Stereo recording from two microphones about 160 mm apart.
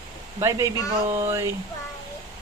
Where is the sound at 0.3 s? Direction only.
20° right (ahead or behind).